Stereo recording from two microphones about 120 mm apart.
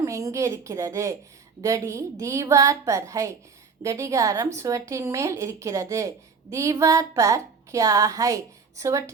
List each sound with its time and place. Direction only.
0.0 s a woman's voice: 25° right (ahead or behind)